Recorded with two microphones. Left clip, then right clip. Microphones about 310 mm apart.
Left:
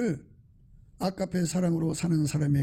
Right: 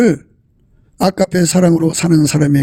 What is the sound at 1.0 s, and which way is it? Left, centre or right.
Speech, right.